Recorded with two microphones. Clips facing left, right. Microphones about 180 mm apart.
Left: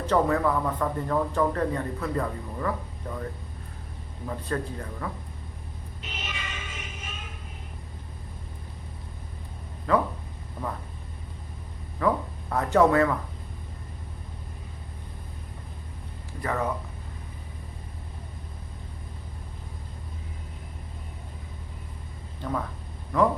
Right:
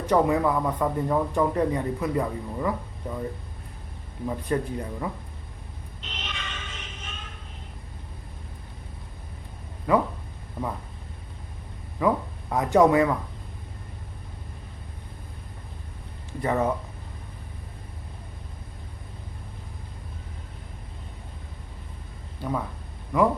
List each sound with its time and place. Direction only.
0.0 s speech: 15° right (ahead or behind)
4.3 s speech: 15° right (ahead or behind)
6.0 s music: 10° left (ahead or behind)
9.9 s speech: 15° right (ahead or behind)
11.9 s speech: 15° right (ahead or behind)
16.4 s speech: 25° right (ahead or behind)
22.4 s speech: 10° right (ahead or behind)